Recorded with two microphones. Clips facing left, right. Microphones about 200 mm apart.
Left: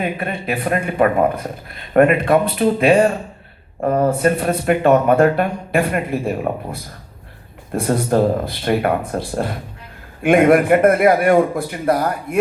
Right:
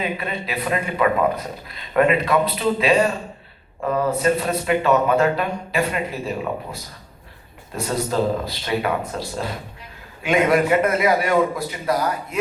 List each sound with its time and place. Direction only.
0.0 s speech: 50° left (ahead or behind)